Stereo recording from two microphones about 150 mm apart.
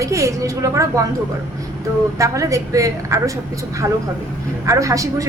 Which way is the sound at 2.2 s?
20° right (ahead or behind).